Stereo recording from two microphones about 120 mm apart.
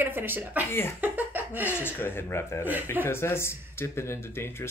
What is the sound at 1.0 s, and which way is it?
Laughter, 15° right (ahead or behind).